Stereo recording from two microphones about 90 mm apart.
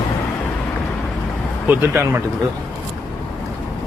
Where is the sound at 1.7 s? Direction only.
25° right (ahead or behind).